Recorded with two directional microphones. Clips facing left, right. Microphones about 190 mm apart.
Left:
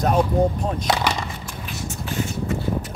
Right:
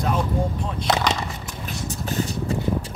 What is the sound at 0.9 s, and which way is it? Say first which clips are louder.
Speech: right 1 dB; centre (ahead or behind).